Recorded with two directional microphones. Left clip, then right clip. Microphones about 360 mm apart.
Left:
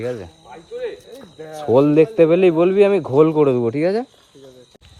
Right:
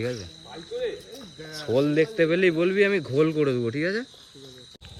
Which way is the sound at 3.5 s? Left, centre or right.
Left.